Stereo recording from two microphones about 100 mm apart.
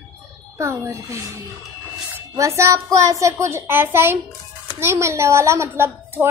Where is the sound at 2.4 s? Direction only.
30° right (ahead or behind).